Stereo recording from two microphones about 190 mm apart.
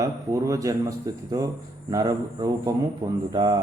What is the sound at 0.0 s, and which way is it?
Speech, 15° right (ahead or behind).